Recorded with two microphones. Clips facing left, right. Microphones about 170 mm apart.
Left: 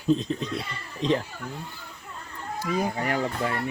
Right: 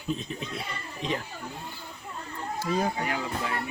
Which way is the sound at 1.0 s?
35° left (ahead or behind).